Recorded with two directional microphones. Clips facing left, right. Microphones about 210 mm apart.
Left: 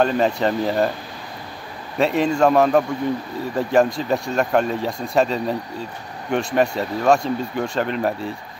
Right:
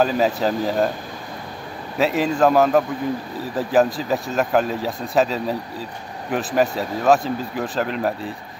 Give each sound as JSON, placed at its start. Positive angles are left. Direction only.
{"t": 0.0, "sound": "speech", "side_deg": -5}
{"t": 2.0, "sound": "speech", "side_deg": 0}